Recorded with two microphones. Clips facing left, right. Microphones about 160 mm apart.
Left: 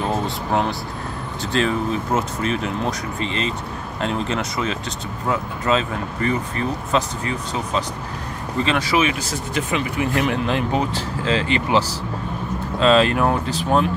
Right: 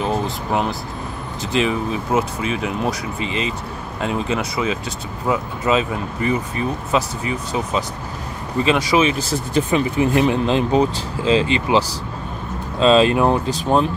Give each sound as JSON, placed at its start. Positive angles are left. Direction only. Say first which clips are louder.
{"t": 0.5, "sound": "speech", "louder": "left 1 dB", "side_deg": 0}
{"t": 9.0, "sound": "speech", "louder": "right 3 dB", "side_deg": -30}
{"t": 12.8, "sound": "speech", "louder": "right 2 dB", "side_deg": -20}